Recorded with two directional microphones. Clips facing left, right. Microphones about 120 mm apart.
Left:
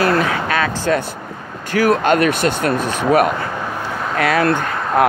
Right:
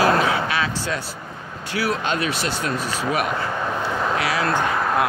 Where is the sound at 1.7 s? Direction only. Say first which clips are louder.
Left 9 dB; 50° left (ahead or behind).